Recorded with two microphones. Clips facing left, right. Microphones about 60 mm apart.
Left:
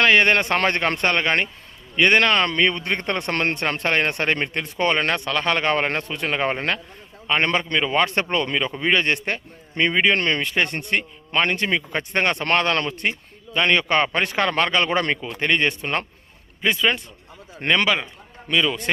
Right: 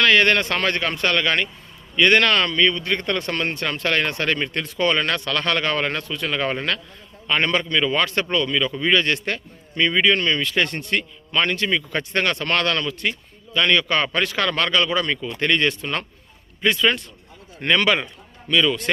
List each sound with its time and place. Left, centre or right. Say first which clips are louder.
0.0 s a man's voice: even; left
3.3 s speech: left 2 dB; left
10.2 s a man's voice: even; left
10.4 s speech: even; left
14.8 s a man's voice: left 1 dB; left
15.1 s speech: even; left
17.8 s a man's voice: right 2 dB; centre
18.5 s speech: right 2 dB; centre